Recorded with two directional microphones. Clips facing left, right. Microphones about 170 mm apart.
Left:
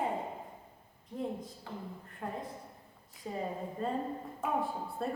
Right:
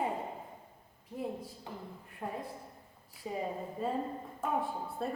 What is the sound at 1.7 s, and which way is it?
A woman's voice, 20° right (ahead or behind).